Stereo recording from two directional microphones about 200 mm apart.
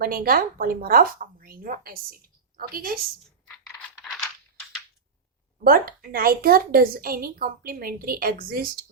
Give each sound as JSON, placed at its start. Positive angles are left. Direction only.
{"t": 0.0, "sound": "a woman's voice", "side_deg": -45}
{"t": 3.4, "sound": "coin", "side_deg": 5}
{"t": 5.6, "sound": "a woman's voice", "side_deg": -45}